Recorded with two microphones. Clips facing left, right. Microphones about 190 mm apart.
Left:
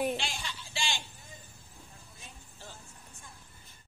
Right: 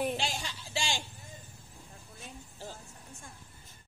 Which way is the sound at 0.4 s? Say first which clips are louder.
Right 2 dB; 40° right (ahead or behind).